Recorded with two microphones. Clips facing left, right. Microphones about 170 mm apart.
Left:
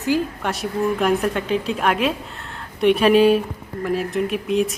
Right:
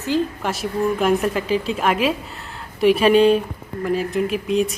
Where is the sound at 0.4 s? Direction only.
Centre (ahead or behind).